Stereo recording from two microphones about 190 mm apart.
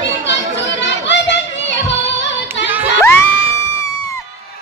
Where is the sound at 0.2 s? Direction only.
65° left (ahead or behind).